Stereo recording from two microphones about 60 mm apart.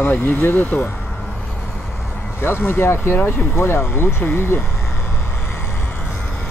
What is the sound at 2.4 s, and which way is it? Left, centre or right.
Speech, left.